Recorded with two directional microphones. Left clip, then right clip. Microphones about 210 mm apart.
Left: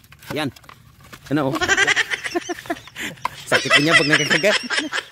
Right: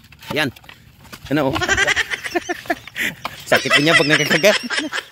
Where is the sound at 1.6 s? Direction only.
Centre (ahead or behind).